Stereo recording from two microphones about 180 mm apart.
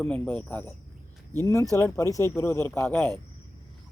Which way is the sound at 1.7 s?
15° left (ahead or behind).